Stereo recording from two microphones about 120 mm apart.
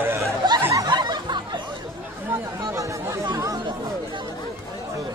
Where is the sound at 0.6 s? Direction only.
20° right (ahead or behind).